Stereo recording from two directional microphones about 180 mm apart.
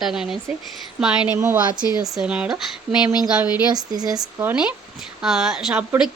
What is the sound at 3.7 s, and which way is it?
Speech, 20° right (ahead or behind).